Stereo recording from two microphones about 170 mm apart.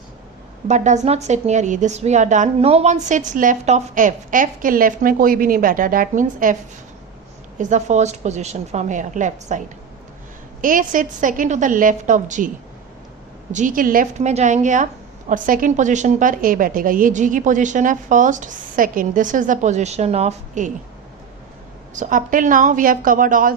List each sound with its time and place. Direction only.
0.7 s a woman's voice: 45° right (ahead or behind)
7.6 s a woman's voice: 45° right (ahead or behind)
13.5 s a woman's voice: 50° right (ahead or behind)
21.9 s a woman's voice: 50° right (ahead or behind)